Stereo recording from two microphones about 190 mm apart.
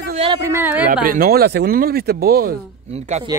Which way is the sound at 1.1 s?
55° right (ahead or behind).